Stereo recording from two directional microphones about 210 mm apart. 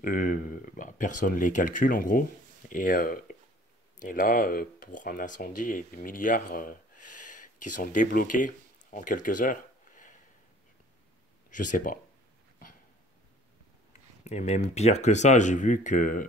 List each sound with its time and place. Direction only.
0.0 s a sound: 40° left (ahead or behind)
1.2 s speech: 40° left (ahead or behind)
11.5 s speech: 40° left (ahead or behind)
14.2 s speech: 30° left (ahead or behind)